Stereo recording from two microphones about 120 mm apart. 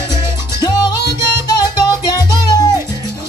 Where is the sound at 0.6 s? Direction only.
35° left (ahead or behind).